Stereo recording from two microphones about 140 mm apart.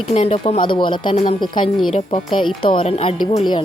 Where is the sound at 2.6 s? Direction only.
40° left (ahead or behind).